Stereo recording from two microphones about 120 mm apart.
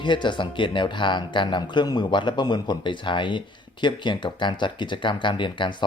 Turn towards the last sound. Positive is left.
turn(degrees=40)  # may be behind; listen again after turning